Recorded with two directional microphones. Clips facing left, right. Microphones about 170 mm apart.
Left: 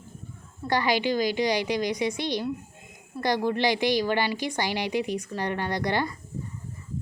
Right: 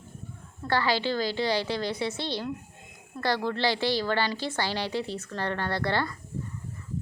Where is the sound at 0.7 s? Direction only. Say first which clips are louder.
Left 2 dB; 15° left (ahead or behind).